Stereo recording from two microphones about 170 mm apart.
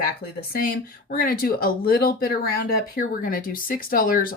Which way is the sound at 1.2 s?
60° left (ahead or behind).